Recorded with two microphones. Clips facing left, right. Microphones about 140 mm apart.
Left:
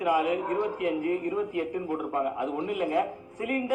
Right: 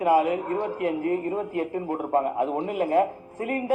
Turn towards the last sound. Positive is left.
turn(degrees=-45)  # may be behind; listen again after turning